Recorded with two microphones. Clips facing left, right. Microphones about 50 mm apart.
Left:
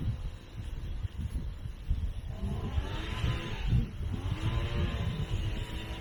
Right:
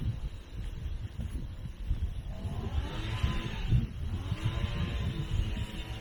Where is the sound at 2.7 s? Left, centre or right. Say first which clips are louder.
Even; left.